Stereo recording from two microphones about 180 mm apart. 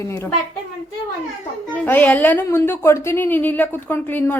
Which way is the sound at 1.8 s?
10° left (ahead or behind).